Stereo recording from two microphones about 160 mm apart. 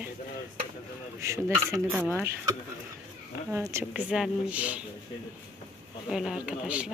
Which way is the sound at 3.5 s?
15° right (ahead or behind).